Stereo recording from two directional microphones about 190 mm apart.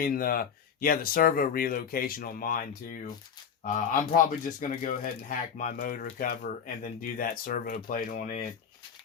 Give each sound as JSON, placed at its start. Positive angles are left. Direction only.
{"t": 0.0, "sound": "speech", "side_deg": 50}